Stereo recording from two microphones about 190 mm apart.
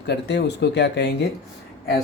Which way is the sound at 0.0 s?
60° left (ahead or behind).